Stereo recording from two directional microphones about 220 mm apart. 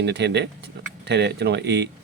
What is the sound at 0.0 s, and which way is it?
Speech, 50° right (ahead or behind).